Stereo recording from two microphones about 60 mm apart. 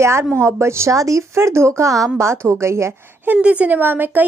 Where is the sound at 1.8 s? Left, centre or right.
Right.